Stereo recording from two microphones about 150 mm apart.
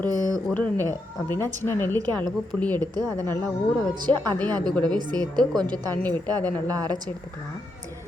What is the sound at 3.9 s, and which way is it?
Speech, 30° right (ahead or behind).